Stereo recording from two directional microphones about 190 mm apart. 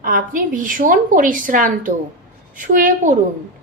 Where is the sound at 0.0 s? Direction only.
45° right (ahead or behind).